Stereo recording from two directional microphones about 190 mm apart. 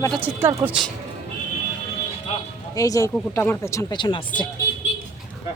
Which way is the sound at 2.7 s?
15° left (ahead or behind).